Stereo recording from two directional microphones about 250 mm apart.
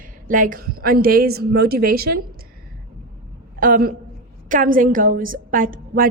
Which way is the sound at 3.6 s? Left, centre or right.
Right.